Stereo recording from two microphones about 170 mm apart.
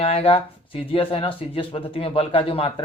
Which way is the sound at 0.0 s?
35° left (ahead or behind).